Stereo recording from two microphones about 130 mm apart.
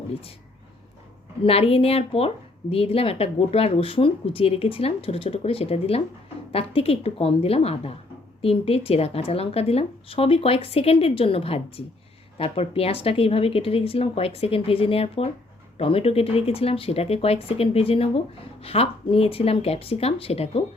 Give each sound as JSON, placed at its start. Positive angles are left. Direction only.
{"t": 1.5, "sound": "a woman's voice", "side_deg": 50}